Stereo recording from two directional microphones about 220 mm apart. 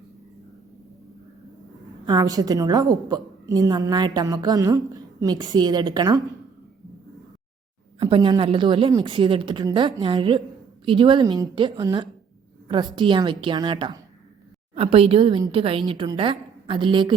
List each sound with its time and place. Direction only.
2.0 s a woman's voice: 15° right (ahead or behind)
7.9 s a woman's voice: 25° right (ahead or behind)